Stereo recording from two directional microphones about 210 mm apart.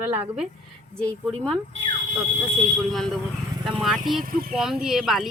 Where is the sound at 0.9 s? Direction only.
5° left (ahead or behind).